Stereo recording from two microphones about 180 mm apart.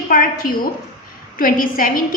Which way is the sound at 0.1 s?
50° left (ahead or behind).